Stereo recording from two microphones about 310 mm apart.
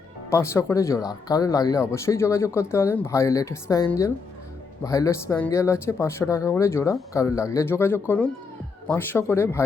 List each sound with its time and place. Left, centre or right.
0.3 s speech: centre